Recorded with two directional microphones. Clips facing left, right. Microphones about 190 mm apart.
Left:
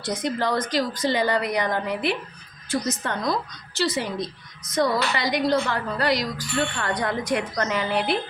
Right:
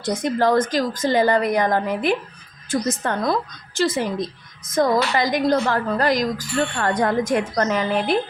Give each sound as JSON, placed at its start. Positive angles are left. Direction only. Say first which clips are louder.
{"t": 0.0, "sound": "a woman's voice", "louder": "right 5 dB", "side_deg": -45}